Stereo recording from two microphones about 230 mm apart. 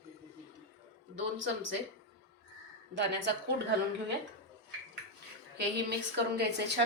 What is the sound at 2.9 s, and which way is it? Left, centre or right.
Speech, right.